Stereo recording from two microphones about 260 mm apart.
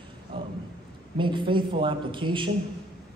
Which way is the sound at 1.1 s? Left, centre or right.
Centre.